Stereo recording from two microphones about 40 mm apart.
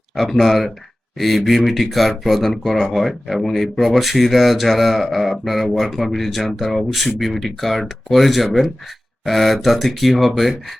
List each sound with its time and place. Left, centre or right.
0.2 s speech: centre